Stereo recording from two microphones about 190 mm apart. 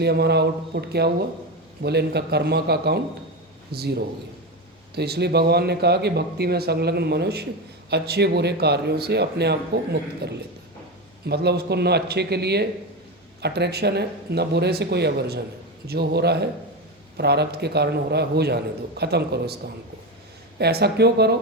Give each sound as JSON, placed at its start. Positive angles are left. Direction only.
{"t": 0.0, "sound": "a man's voice", "side_deg": -60}
{"t": 4.9, "sound": "speech", "side_deg": -60}
{"t": 20.6, "sound": "speech", "side_deg": -60}